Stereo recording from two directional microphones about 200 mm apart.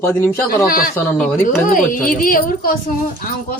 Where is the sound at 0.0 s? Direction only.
10° left (ahead or behind).